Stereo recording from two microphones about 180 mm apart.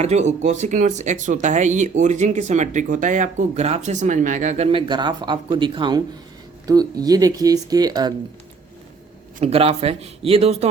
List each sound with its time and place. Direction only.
0.0 s speech: 40° right (ahead or behind); by 8.1 s 20° right (ahead or behind)
9.4 s speech: 35° right (ahead or behind)